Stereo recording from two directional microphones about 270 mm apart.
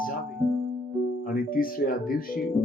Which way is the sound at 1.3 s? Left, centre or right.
Left.